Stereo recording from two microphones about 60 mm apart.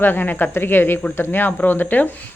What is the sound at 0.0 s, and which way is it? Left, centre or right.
Speech, left.